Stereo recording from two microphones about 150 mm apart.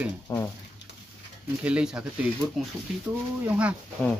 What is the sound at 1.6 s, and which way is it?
Speech, 5° right (ahead or behind).